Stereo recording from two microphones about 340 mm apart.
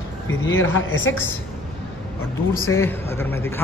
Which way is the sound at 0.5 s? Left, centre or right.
Left.